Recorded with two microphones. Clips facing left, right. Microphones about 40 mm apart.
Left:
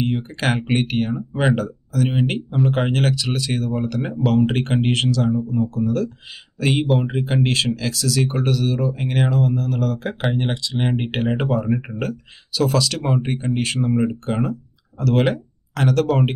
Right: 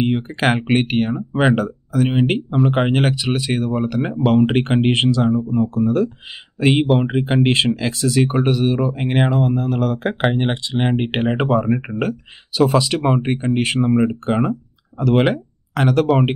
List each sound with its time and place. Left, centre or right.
0.0 s speech: right